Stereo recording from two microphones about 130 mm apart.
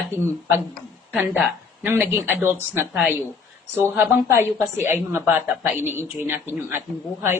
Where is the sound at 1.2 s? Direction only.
15° right (ahead or behind).